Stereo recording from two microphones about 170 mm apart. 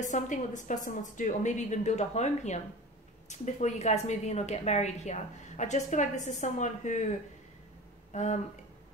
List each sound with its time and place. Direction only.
0.0 s a woman's voice: 45° left (ahead or behind)
8.1 s speech: 45° left (ahead or behind)